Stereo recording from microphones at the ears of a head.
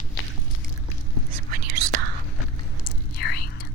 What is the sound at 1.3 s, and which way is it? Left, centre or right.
Whispering, right.